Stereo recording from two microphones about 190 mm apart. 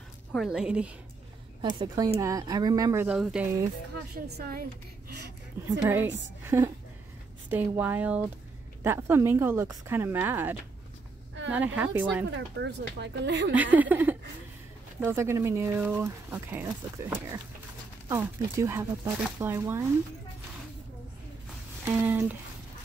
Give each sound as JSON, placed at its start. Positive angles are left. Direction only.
{"t": 0.3, "sound": "a woman's voice", "side_deg": 0}
{"t": 1.6, "sound": "speech", "side_deg": -25}
{"t": 3.1, "sound": "a woman's voice", "side_deg": -5}
{"t": 4.4, "sound": "a woman's voice", "side_deg": -50}
{"t": 5.6, "sound": "a woman's voice", "side_deg": -15}
{"t": 11.5, "sound": "speech", "side_deg": -10}
{"t": 12.3, "sound": "speech", "side_deg": -70}
{"t": 13.6, "sound": "speech", "side_deg": -10}
{"t": 21.8, "sound": "speech", "side_deg": -10}